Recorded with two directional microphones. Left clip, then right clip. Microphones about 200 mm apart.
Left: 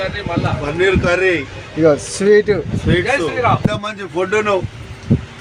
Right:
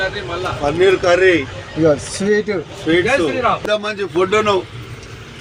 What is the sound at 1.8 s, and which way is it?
Speech, 25° left (ahead or behind).